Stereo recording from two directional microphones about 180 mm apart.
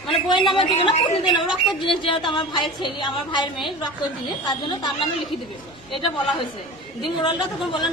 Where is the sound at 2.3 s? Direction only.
25° left (ahead or behind).